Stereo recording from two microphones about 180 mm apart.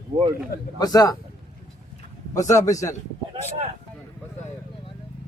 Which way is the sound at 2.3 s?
15° left (ahead or behind).